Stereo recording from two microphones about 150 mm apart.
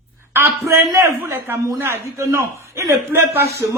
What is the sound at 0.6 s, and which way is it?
A man's voice, 20° right (ahead or behind).